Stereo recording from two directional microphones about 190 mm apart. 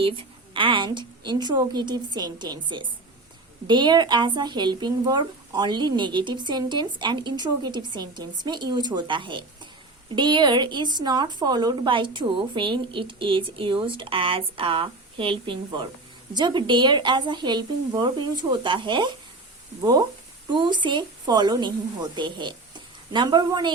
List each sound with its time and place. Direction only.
0.0 s a woman's voice: 25° right (ahead or behind)
3.7 s a woman's voice: 25° right (ahead or behind)